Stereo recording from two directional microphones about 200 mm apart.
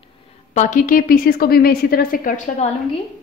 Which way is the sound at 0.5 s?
35° left (ahead or behind).